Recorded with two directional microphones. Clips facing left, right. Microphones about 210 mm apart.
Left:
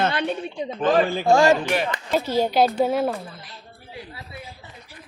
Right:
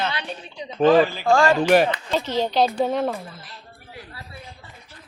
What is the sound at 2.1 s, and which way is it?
Speech, 10° left (ahead or behind).